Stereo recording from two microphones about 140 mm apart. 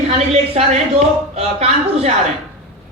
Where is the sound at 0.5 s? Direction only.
50° right (ahead or behind).